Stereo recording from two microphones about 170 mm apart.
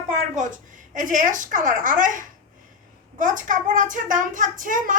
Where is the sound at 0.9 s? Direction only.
50° right (ahead or behind).